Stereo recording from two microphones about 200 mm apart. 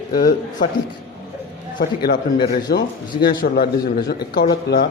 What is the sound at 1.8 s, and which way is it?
Speech, 50° left (ahead or behind).